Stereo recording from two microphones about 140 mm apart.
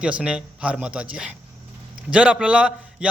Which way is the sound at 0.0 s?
10° right (ahead or behind).